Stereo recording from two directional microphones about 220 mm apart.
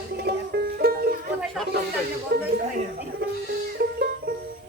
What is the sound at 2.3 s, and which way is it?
Speech, 45° right (ahead or behind).